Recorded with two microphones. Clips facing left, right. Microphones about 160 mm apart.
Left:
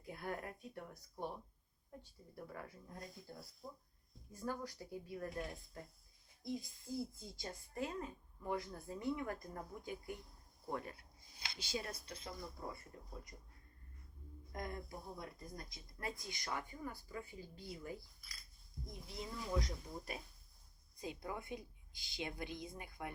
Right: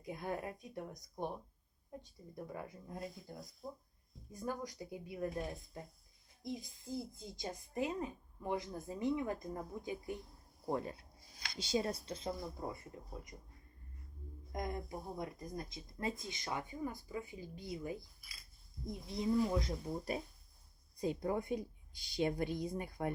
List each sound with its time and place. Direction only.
0.0 s speech: 20° right (ahead or behind)
3.6 s speech: 5° right (ahead or behind)
4.3 s speech: 15° right (ahead or behind)
14.5 s speech: 20° right (ahead or behind)
21.0 s speech: 45° right (ahead or behind)